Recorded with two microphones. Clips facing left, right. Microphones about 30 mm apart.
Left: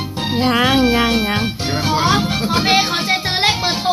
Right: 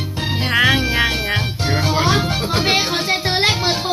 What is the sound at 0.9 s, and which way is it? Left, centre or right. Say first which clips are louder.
Music: left 2 dB; right.